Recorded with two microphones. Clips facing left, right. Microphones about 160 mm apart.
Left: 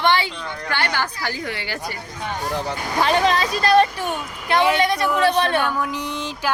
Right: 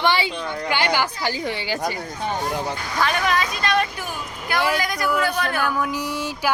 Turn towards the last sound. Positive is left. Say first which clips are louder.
# right 1 dB
turn(degrees=-10)  # may be behind; listen again after turning